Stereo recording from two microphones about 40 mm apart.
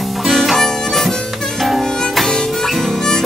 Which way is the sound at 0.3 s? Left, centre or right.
Centre.